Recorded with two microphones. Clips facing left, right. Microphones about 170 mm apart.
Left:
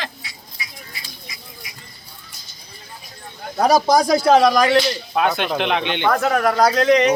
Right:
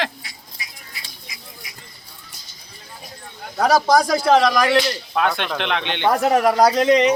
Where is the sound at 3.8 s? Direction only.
Centre (ahead or behind).